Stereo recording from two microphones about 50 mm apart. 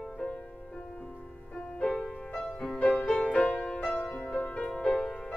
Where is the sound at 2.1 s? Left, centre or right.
Centre.